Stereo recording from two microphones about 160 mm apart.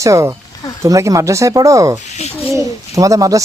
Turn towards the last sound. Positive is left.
turn(degrees=-20)  # may be behind; listen again after turning